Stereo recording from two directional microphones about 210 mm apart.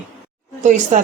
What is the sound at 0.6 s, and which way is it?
Speech, 35° right (ahead or behind).